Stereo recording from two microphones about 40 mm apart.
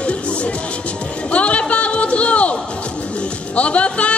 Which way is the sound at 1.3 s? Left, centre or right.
Left.